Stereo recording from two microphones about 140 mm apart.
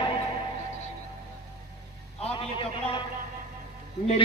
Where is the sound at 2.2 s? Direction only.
40° left (ahead or behind).